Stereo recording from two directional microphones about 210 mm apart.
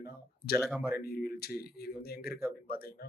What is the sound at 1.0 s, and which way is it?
Speech, 45° left (ahead or behind).